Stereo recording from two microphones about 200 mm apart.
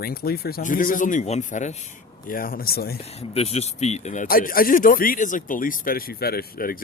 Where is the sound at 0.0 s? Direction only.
50° left (ahead or behind).